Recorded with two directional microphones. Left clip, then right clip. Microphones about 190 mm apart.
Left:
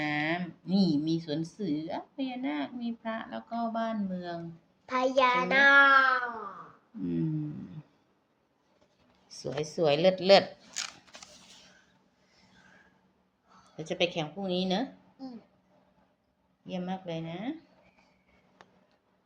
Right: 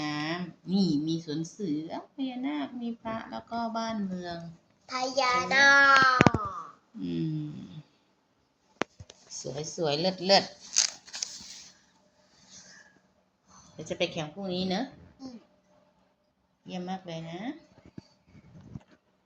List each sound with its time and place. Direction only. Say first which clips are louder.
0.0 s a sound: left 3 dB; centre (ahead or behind)
0.8 s a woman's voice: even; centre (ahead or behind)
4.9 s a child's voice: left 2 dB; 65° left (ahead or behind); by 6.1 s 30° left (ahead or behind)
7.0 s a woman's voice: left 1 dB; 5° left (ahead or behind)
9.3 s speech: left 2 dB; 10° left (ahead or behind)
10.8 s scissors: right 11 dB; 30° left (ahead or behind)
13.7 s speech: left 1 dB; 10° left (ahead or behind)
16.6 s speech: left 1 dB; 5° left (ahead or behind)